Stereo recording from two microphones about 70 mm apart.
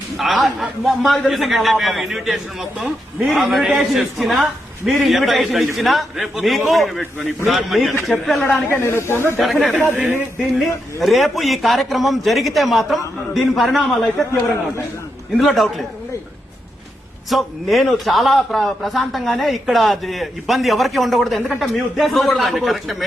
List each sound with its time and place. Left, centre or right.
0.2 s a man's voice: centre
8.4 s speech: left
9.4 s a man's voice: centre
17.2 s a man's voice: centre